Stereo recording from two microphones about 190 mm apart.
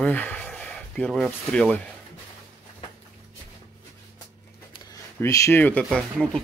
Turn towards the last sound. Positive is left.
turn(degrees=0)  # may be behind; listen again after turning